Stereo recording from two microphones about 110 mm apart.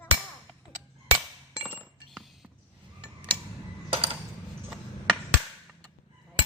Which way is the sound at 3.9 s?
60° right (ahead or behind).